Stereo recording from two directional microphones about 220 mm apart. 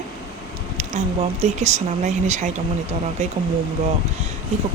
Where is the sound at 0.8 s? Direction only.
30° right (ahead or behind).